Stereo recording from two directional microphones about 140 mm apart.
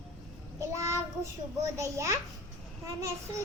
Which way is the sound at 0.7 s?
20° right (ahead or behind).